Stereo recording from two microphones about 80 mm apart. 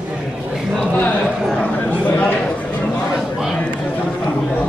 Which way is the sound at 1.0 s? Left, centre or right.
Centre.